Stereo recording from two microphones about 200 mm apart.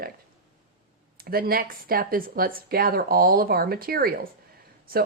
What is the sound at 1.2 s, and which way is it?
Speech, 50° right (ahead or behind).